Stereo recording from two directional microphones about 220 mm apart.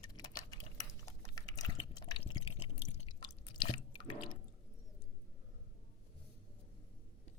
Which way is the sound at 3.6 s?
20° left (ahead or behind).